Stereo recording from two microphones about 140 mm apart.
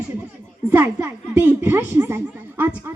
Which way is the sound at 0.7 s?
15° right (ahead or behind).